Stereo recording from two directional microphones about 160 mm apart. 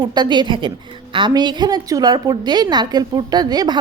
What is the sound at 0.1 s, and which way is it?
A woman's voice, 25° right (ahead or behind).